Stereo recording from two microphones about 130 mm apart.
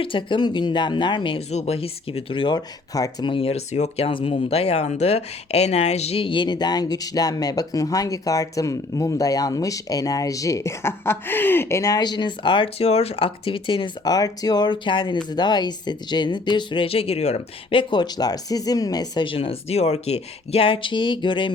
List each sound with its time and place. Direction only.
0.0 s speech: 40° left (ahead or behind)
1.5 s speech: 55° left (ahead or behind); by 3.2 s 30° left (ahead or behind)
3.2 s speech: 45° left (ahead or behind)